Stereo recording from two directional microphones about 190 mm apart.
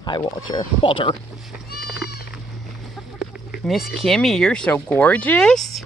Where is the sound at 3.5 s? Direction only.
Centre (ahead or behind).